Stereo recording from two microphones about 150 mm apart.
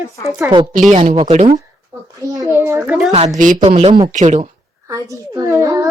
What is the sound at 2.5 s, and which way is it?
Speech, 15° right (ahead or behind).